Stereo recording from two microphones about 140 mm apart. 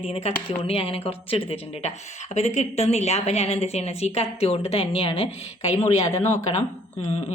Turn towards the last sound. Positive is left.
turn(degrees=45)  # may be behind; listen again after turning